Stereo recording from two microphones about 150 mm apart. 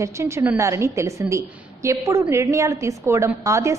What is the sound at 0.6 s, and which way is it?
A woman's voice, 20° right (ahead or behind).